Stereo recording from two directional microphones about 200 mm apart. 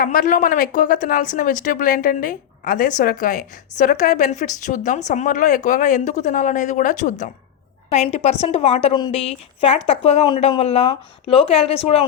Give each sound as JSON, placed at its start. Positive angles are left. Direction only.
{"t": 0.0, "sound": "a woman's voice", "side_deg": 45}